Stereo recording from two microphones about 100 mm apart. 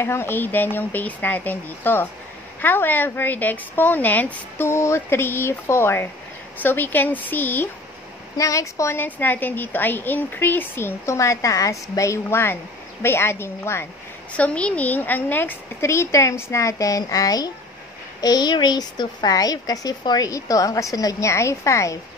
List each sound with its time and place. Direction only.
0.0 s a woman's voice: 25° left (ahead or behind)
8.4 s speech: 35° left (ahead or behind)
9.0 s a woman's voice: 20° left (ahead or behind)
14.3 s a woman's voice: 15° left (ahead or behind); by 21.9 s 30° left (ahead or behind)